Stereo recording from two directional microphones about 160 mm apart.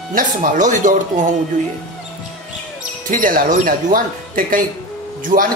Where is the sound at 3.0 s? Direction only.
60° right (ahead or behind).